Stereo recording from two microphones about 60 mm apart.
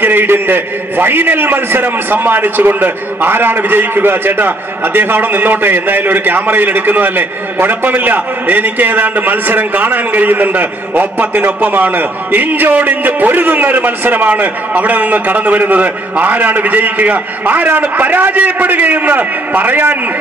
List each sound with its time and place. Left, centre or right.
0.0 s a man's voice: right